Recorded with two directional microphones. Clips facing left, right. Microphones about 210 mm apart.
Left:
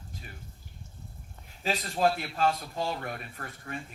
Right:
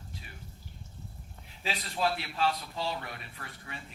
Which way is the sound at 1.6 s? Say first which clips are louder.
Left 5 dB; 45° left (ahead or behind).